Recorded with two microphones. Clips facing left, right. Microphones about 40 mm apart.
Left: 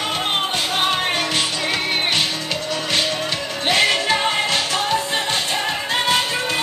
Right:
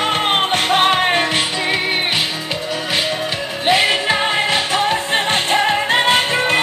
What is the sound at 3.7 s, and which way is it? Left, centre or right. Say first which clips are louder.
Music: right 3 dB; centre.